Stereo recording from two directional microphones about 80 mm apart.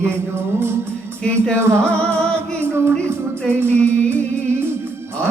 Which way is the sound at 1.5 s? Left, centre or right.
Right.